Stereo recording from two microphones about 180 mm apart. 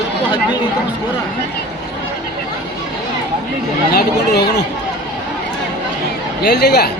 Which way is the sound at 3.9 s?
65° left (ahead or behind).